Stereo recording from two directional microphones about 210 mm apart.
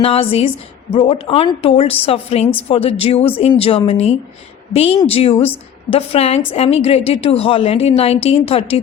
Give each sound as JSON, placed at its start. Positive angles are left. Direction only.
{"t": 0.0, "sound": "a woman's voice", "side_deg": 25}